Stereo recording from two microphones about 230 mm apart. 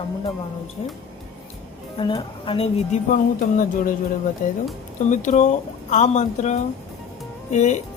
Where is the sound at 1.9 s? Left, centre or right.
Left.